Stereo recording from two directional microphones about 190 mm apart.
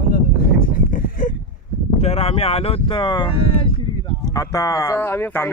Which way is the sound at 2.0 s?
30° left (ahead or behind).